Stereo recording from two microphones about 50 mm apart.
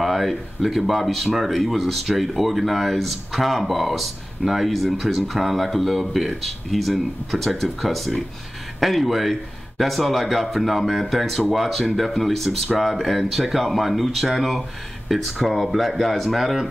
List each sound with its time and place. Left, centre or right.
0.0 s speech: centre